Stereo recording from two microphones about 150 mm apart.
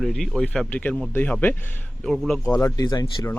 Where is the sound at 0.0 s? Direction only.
Centre (ahead or behind).